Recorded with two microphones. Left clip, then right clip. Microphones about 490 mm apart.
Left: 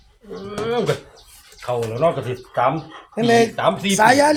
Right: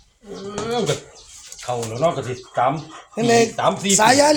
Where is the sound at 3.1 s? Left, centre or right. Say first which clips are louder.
Left 1 dB; left.